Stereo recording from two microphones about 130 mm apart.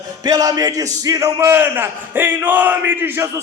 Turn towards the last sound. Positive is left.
turn(degrees=-15)  # may be behind; listen again after turning